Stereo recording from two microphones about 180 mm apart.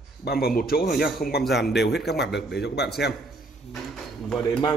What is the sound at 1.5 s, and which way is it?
A man's voice, 65° left (ahead or behind).